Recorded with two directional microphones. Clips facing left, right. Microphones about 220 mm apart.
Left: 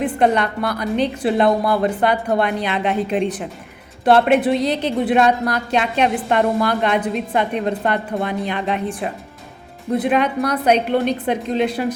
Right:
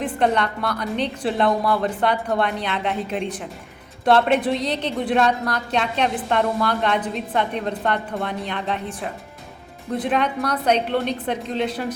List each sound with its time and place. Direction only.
0.0 s a woman's voice: 10° left (ahead or behind)
1.5 s a woman's voice: 35° left (ahead or behind)
1.8 s a woman's voice: 10° left (ahead or behind)